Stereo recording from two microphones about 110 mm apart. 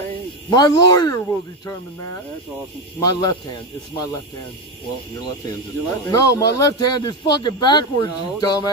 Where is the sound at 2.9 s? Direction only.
35° left (ahead or behind).